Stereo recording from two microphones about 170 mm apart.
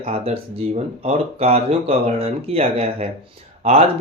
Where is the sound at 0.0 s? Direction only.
35° right (ahead or behind).